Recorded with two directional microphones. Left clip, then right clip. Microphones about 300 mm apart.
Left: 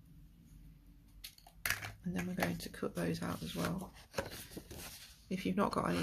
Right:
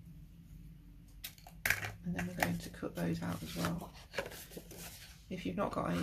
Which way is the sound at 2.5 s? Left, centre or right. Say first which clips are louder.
Left 1 dB; left.